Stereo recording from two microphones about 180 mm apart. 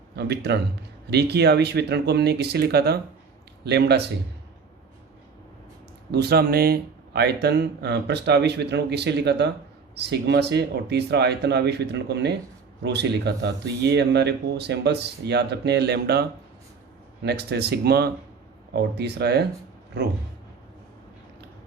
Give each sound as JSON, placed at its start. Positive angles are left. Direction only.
{"t": 0.2, "sound": "speech", "side_deg": -70}
{"t": 6.1, "sound": "speech", "side_deg": -65}
{"t": 17.2, "sound": "speech", "side_deg": -65}